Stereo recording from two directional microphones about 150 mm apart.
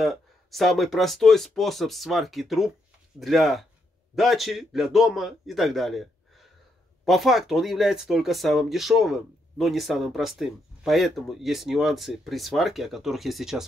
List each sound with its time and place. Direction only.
0.0 s speech: centre (ahead or behind)